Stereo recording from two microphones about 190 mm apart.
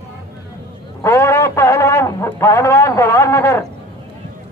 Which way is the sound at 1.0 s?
15° left (ahead or behind).